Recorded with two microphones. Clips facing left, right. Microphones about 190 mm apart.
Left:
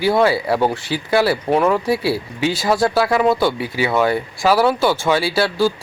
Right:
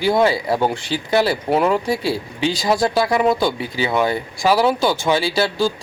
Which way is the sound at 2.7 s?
15° right (ahead or behind).